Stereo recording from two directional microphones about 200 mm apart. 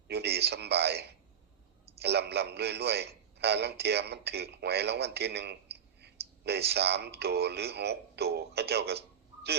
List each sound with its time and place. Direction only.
0.1 s a man's voice: 55° right (ahead or behind)